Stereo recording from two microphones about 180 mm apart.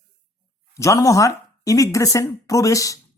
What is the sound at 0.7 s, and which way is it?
Speech, 15° left (ahead or behind).